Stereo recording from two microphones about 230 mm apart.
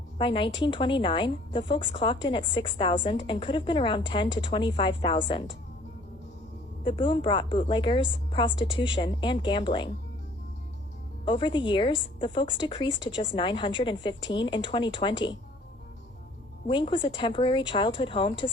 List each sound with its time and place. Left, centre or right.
0.2 s a woman's voice: left
6.8 s a woman's voice: left
11.3 s a woman's voice: left
16.6 s a woman's voice: left